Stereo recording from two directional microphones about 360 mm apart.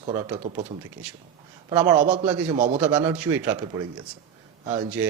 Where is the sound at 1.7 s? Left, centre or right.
Centre.